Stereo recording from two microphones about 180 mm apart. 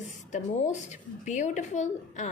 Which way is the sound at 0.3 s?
40° left (ahead or behind).